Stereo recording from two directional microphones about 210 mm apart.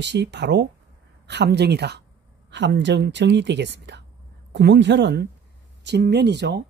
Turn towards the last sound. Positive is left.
turn(degrees=-55)  # may be behind; listen again after turning